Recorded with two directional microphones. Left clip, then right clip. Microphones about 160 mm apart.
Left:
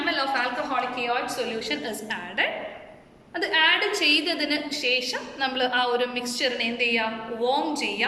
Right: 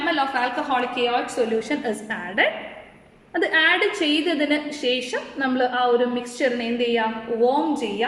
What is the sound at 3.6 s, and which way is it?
A woman's voice, 45° right (ahead or behind).